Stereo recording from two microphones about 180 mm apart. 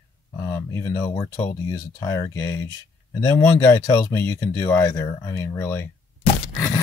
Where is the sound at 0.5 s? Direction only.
20° left (ahead or behind).